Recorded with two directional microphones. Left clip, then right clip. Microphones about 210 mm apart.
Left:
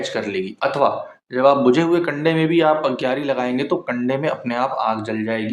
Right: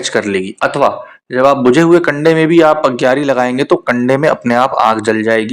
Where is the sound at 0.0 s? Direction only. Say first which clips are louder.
Right 8 dB; 40° right (ahead or behind).